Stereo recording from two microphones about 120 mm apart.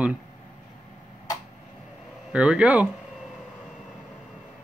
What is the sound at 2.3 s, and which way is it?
Speech, 10° right (ahead or behind).